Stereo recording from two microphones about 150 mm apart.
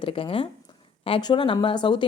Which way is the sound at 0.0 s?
35° left (ahead or behind).